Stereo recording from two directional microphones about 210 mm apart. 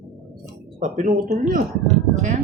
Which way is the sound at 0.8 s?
40° right (ahead or behind).